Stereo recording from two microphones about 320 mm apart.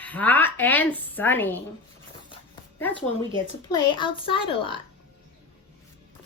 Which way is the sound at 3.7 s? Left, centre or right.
Centre.